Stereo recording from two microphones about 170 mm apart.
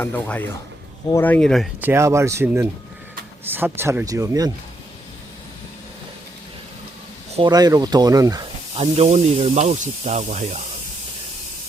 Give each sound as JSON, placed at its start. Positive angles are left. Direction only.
{"t": 0.0, "sound": "speech", "side_deg": 10}
{"t": 1.8, "sound": "speech", "side_deg": -15}
{"t": 7.4, "sound": "speech", "side_deg": -25}
{"t": 8.8, "sound": "speech", "side_deg": -40}